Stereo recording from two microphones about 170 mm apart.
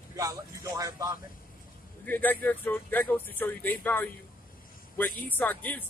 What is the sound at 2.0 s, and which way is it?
Speech, 10° left (ahead or behind).